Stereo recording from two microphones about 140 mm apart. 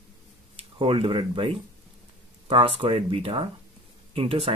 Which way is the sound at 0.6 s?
40° right (ahead or behind).